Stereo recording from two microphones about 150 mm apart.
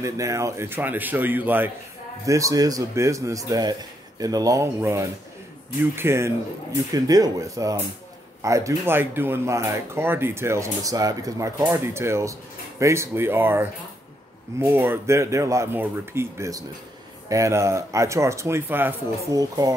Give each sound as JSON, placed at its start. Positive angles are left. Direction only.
{"t": 0.0, "sound": "speech", "side_deg": -20}